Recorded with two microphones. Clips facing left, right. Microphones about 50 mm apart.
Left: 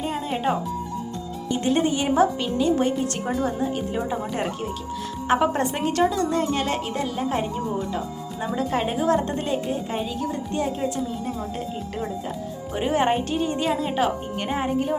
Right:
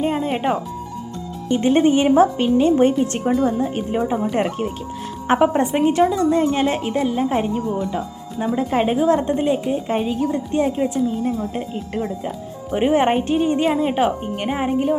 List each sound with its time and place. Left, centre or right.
0.0 s music: right
1.5 s a woman's voice: right
5.4 s a woman's voice: centre
9.8 s a woman's voice: right